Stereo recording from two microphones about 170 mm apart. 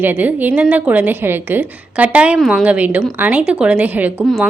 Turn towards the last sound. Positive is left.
turn(degrees=-5)  # may be behind; listen again after turning